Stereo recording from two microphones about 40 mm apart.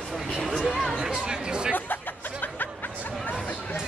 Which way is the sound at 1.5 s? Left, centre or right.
Right.